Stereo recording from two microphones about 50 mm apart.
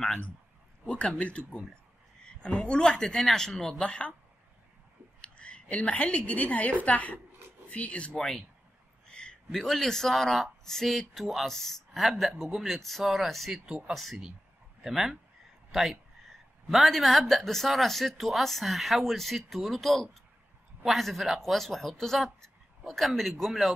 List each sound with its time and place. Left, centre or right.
0.8 s speech: left
2.4 s speech: left
5.2 s a woman's voice: left
9.1 s a sound: centre
9.5 s speech: centre